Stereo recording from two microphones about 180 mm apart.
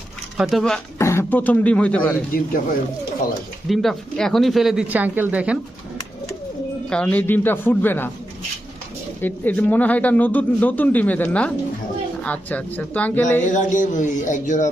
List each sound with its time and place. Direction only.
0.3 s speech: centre (ahead or behind)
0.9 s speech: 15° left (ahead or behind)
3.7 s speech: centre (ahead or behind)
6.9 s speech: 10° left (ahead or behind)
9.2 s speech: 10° left (ahead or behind)
13.4 s speech: 45° left (ahead or behind)